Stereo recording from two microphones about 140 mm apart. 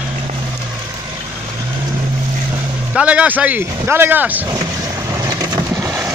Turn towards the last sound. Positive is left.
turn(degrees=-25)  # may be behind; listen again after turning